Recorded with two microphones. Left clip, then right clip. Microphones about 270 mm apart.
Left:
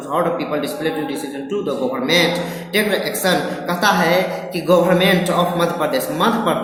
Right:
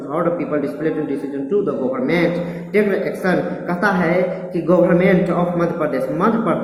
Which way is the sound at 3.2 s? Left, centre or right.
Centre.